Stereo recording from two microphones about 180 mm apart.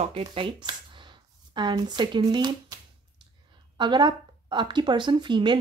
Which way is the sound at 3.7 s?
25° right (ahead or behind).